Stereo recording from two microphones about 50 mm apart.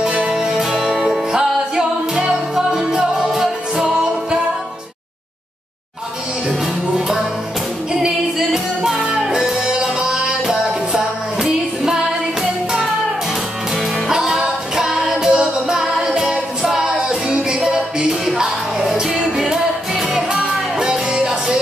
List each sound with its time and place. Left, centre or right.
0.0 s music: centre
0.3 s music: centre
6.6 s music: centre
13.7 s music: centre
20.2 s music: centre